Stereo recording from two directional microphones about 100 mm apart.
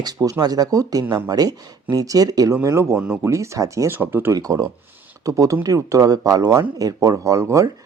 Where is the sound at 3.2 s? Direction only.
30° right (ahead or behind).